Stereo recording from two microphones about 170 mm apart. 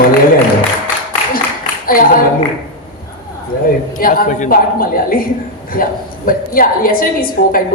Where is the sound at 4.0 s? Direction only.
50° left (ahead or behind).